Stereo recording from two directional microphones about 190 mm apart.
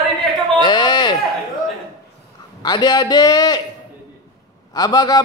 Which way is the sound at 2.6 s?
20° left (ahead or behind).